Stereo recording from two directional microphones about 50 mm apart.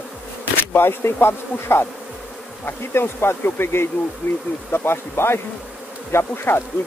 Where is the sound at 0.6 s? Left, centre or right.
Left.